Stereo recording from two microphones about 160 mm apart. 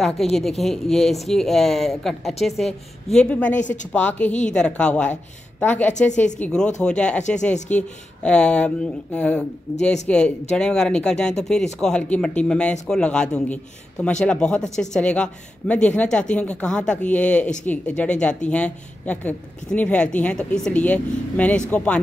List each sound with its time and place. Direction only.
0.0 s a woman's voice: centre (ahead or behind)
7.5 s speech: 45° left (ahead or behind)
8.2 s a woman's voice: 5° left (ahead or behind)